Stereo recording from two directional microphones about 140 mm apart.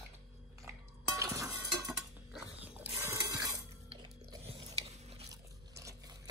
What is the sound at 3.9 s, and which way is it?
Mechanisms, 45° right (ahead or behind).